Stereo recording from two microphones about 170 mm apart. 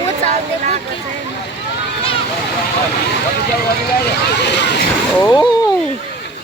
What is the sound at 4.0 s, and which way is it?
Speech, 75° left (ahead or behind).